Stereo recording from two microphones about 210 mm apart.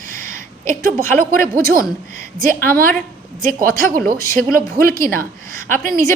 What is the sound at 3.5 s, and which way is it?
Speech, 40° right (ahead or behind).